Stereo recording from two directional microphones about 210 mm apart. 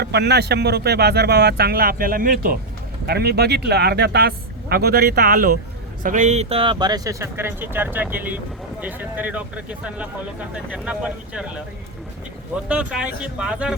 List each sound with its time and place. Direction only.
0.0 s speech: 50° right (ahead or behind); by 11.6 s 5° right (ahead or behind)
12.6 s speech: 5° right (ahead or behind)